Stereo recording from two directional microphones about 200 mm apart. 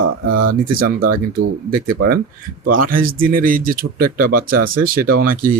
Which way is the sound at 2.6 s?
45° right (ahead or behind).